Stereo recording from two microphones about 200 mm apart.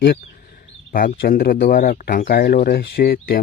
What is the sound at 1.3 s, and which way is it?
Speech, 45° left (ahead or behind).